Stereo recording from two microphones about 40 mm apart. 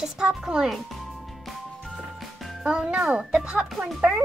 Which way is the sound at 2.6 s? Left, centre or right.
Centre.